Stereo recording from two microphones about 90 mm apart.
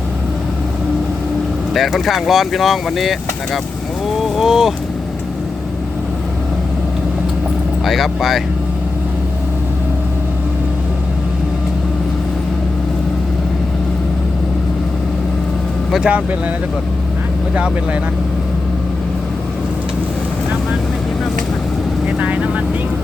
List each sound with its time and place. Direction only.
1.7 s speech: centre (ahead or behind)
7.9 s speech: centre (ahead or behind)
15.9 s speech: 10° right (ahead or behind)
22.2 s speech: 15° right (ahead or behind)